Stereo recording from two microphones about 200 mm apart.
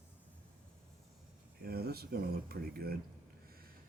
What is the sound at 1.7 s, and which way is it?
Speech, 50° right (ahead or behind).